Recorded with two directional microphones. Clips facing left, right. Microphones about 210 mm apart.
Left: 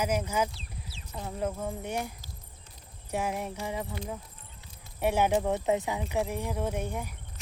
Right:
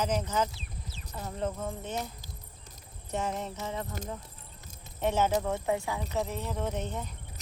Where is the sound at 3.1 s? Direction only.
10° left (ahead or behind).